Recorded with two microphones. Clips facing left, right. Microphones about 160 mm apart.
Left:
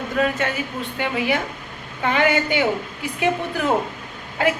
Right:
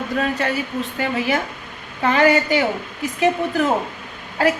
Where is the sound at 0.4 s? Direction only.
35° right (ahead or behind).